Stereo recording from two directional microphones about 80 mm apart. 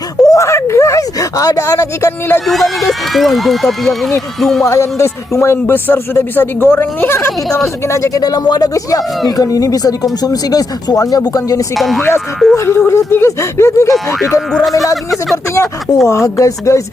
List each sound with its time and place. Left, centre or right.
0.2 s speech: left
2.5 s speech: centre
4.6 s speech: left
8.2 s speech: left
11.8 s speech: centre
12.5 s speech: left
14.5 s speech: centre
15.5 s speech: left